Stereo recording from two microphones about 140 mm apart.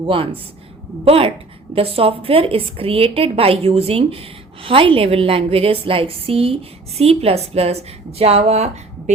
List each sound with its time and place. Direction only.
0.0 s a woman's voice: 40° right (ahead or behind)